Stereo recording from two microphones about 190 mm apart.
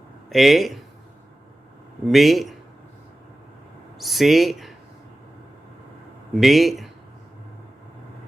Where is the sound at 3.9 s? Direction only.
Centre (ahead or behind).